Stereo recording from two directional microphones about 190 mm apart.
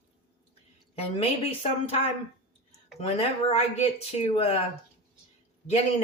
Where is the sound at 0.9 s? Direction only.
30° left (ahead or behind).